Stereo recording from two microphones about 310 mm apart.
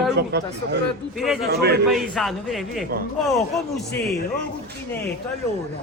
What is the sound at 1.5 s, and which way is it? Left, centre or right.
Speech, right.